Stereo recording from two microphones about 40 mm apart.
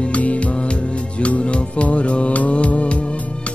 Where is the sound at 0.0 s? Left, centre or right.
Left.